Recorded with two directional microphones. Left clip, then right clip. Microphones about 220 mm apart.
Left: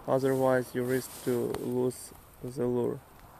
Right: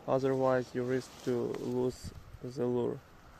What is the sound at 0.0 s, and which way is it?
Speech, centre (ahead or behind).